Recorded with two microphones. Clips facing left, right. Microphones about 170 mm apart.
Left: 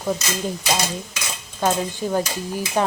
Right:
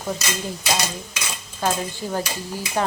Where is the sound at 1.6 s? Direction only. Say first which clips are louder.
Left 3 dB; 20° left (ahead or behind).